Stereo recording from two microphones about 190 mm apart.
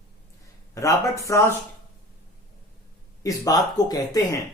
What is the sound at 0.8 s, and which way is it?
Speech, 15° left (ahead or behind).